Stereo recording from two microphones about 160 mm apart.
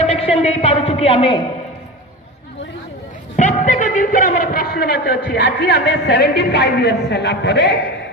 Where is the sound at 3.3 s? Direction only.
50° left (ahead or behind); by 7.8 s 90° left.